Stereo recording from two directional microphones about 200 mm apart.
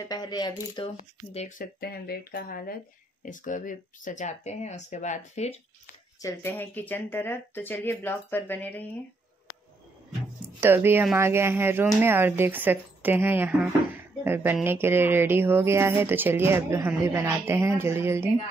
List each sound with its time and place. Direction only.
0.1 s speech: 20° left (ahead or behind)
1.8 s speech: 50° left (ahead or behind); by 5.6 s 35° left (ahead or behind)
6.2 s speech: 10° left (ahead or behind)
10.6 s speech: 10° right (ahead or behind)